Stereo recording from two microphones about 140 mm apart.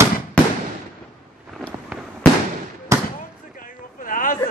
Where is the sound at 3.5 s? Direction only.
80° left.